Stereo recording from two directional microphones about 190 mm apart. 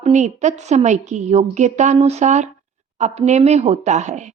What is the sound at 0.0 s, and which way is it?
A woman's voice, 40° right (ahead or behind).